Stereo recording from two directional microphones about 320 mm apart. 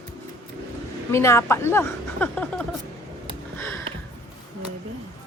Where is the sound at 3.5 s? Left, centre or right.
Centre.